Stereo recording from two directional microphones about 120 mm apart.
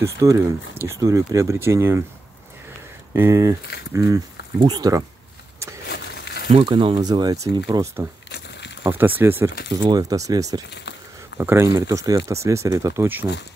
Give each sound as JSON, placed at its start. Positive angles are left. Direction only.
{"t": 0.0, "sound": "speech", "side_deg": -25}
{"t": 3.1, "sound": "speech", "side_deg": -20}
{"t": 6.5, "sound": "speech", "side_deg": -45}
{"t": 8.8, "sound": "speech", "side_deg": -20}
{"t": 9.8, "sound": "speech", "side_deg": -30}